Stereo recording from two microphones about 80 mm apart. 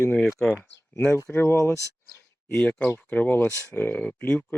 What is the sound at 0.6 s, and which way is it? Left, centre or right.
Speech, centre.